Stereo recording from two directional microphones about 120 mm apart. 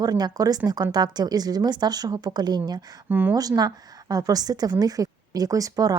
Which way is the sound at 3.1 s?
15° right (ahead or behind).